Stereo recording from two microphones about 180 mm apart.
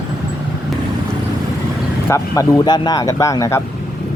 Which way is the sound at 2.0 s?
15° left (ahead or behind).